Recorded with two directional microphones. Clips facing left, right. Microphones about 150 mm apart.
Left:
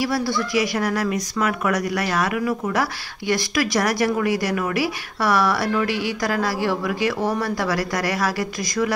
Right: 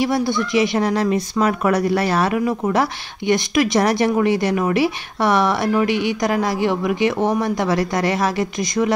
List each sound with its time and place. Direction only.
0.0 s speech: 20° right (ahead or behind)